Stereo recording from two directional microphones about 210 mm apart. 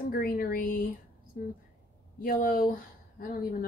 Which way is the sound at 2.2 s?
45° left (ahead or behind).